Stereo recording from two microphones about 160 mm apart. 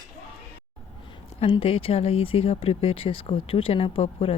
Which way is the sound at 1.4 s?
35° left (ahead or behind).